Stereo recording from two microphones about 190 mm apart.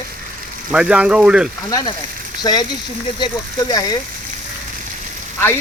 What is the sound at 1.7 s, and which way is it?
Speech, 20° left (ahead or behind).